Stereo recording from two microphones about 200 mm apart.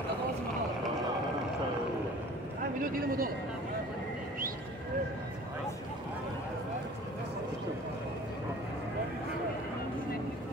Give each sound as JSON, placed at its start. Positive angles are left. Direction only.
{"t": 2.8, "sound": "a man's voice", "side_deg": -45}